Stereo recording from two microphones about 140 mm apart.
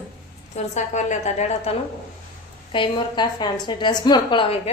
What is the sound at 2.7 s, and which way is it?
A woman's voice, 35° left (ahead or behind).